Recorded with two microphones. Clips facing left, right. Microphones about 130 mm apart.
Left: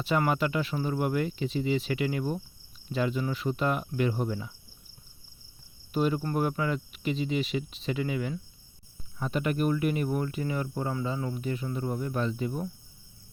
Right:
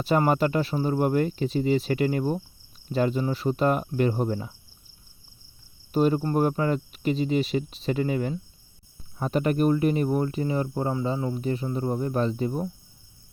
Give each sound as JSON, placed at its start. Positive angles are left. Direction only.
{"t": 0.0, "sound": "speech", "side_deg": -40}
{"t": 5.9, "sound": "speech", "side_deg": -40}